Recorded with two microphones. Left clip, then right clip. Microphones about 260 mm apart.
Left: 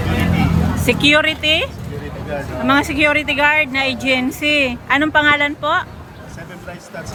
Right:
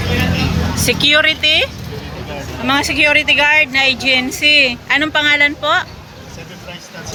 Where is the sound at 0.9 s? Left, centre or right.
Centre.